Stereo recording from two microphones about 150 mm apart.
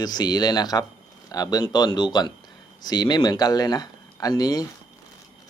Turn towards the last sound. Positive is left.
turn(degrees=25)  # may be behind; listen again after turning